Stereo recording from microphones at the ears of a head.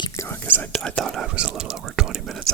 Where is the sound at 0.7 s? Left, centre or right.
Right.